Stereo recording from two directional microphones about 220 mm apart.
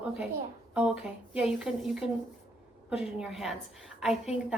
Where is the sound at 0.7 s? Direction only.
5° right (ahead or behind).